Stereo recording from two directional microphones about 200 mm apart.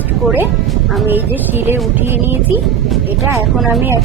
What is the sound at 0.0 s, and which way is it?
A woman's voice, 5° right (ahead or behind).